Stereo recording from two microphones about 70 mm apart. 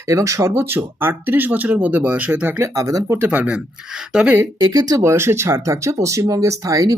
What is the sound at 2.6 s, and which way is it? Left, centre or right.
Speech, right.